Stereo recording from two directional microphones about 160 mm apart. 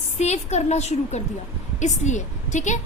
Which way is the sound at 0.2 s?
45° left (ahead or behind).